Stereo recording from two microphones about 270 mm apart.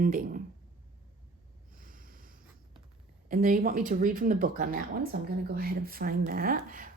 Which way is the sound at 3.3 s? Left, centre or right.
Right.